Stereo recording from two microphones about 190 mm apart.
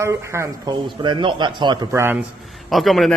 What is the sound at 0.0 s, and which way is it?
A man's voice, 15° right (ahead or behind).